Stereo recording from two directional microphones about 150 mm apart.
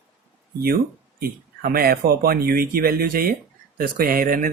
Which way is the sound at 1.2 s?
90° right.